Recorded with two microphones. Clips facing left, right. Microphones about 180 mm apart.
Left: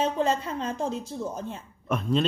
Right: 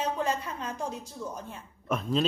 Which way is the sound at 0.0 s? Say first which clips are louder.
Left 5 dB; 25° left (ahead or behind).